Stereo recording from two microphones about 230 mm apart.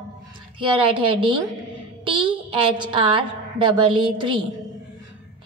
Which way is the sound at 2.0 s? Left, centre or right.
Right.